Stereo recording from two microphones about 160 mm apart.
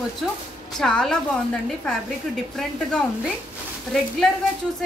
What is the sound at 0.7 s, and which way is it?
Speech, 5° left (ahead or behind).